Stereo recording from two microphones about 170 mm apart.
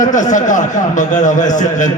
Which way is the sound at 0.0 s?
50° left (ahead or behind).